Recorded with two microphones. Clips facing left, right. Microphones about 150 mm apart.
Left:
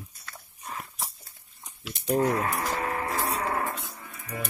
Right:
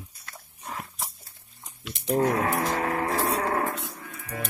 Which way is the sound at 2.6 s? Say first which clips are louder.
Right 3 dB; 80° right.